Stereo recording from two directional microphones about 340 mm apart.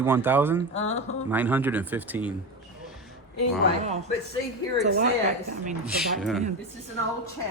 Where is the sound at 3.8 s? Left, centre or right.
Centre.